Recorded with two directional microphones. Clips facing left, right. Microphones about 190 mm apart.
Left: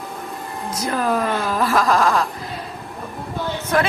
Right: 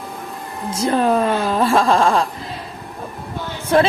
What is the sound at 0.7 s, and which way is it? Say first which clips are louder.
Speech: right 5 dB; 25° right (ahead or behind).